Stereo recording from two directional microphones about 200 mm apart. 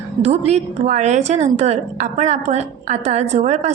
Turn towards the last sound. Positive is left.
turn(degrees=-35)  # may be behind; listen again after turning